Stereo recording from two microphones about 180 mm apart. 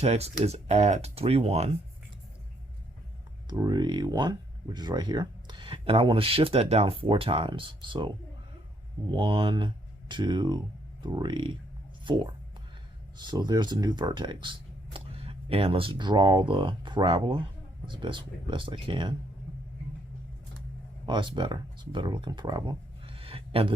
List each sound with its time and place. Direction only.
0.0 s speech: 35° right (ahead or behind)
3.5 s speech: 20° right (ahead or behind)
21.1 s speech: 25° right (ahead or behind)